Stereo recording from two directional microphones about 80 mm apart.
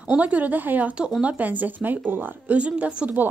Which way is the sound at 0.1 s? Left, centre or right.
Centre.